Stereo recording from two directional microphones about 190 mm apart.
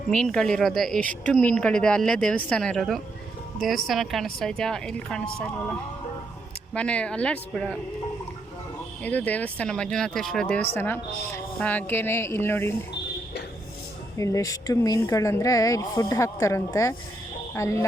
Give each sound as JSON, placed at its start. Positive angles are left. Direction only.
{"t": 0.1, "sound": "speech", "side_deg": 5}
{"t": 6.7, "sound": "speech", "side_deg": 5}
{"t": 9.0, "sound": "speech", "side_deg": 10}
{"t": 14.2, "sound": "speech", "side_deg": 15}